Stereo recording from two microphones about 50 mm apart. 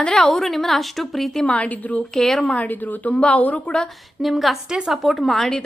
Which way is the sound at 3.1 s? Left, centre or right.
Left.